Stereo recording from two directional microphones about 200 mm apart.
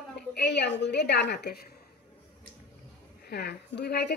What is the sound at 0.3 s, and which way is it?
A woman's voice, 55° left (ahead or behind).